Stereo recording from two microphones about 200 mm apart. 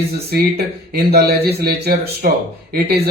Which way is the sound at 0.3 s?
50° right (ahead or behind).